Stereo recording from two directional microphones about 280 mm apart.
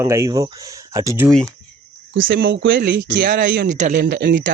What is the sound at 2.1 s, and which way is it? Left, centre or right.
Speech, right.